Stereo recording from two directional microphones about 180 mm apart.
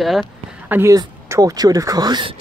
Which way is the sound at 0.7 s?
15° right (ahead or behind).